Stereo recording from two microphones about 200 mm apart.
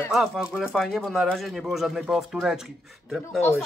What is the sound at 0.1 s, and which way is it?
Speech, centre (ahead or behind).